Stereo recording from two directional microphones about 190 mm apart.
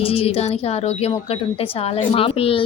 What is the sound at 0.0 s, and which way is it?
Speech, 30° left (ahead or behind).